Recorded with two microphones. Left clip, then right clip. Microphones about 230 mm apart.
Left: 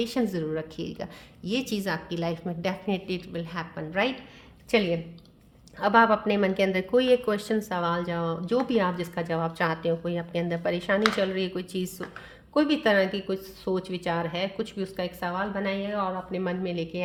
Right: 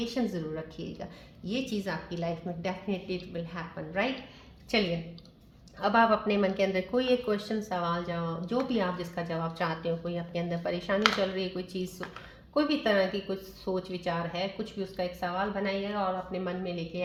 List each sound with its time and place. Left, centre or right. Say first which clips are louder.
0.0 s speech: left 5 dB; left
5.8 s speech: left 4 dB; left